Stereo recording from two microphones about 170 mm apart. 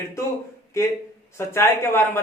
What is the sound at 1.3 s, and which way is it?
Speech, 15° left (ahead or behind).